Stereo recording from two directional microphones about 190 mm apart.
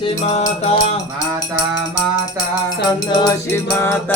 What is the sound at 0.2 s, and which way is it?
Music, 35° left (ahead or behind).